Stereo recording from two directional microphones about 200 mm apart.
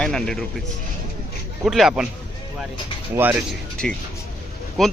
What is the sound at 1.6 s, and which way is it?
Speech, centre (ahead or behind).